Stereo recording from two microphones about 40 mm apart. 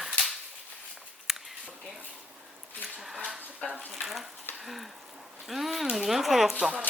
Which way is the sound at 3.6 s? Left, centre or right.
Left.